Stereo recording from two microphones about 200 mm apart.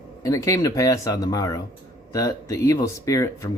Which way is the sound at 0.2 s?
15° left (ahead or behind).